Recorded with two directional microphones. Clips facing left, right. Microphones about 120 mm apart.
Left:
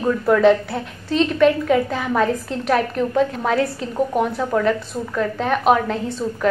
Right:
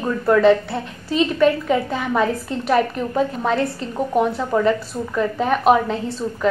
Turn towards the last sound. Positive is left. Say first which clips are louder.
# even
turn(degrees=0)  # may be behind; listen again after turning